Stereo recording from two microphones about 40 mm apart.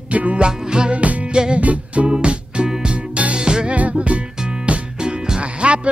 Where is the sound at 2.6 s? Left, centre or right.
Centre.